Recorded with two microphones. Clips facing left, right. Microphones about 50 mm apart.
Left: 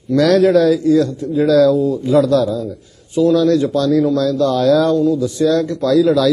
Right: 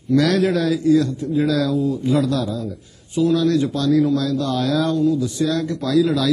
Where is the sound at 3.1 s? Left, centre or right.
Right.